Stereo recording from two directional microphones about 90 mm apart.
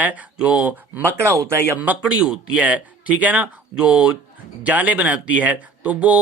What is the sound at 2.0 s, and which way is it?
A man's voice, 10° right (ahead or behind).